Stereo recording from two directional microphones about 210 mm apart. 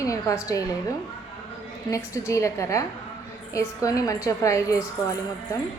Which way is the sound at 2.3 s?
15° left (ahead or behind).